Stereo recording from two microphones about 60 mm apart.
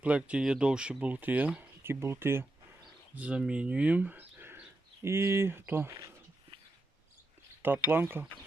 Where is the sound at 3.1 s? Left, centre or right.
Right.